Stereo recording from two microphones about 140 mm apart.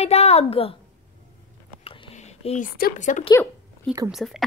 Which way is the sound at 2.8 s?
65° left (ahead or behind).